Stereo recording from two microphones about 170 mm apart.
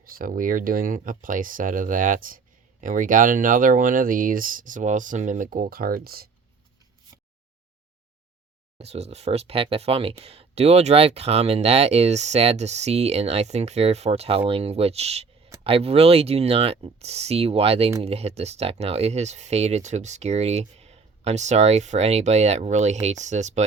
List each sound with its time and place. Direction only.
0.1 s speech: 55° right (ahead or behind)
8.8 s speech: 40° right (ahead or behind)